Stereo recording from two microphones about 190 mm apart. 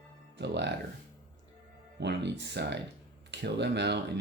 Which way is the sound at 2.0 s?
65° right (ahead or behind).